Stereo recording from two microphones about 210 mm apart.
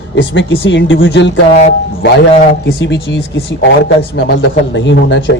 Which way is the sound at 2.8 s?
55° left (ahead or behind).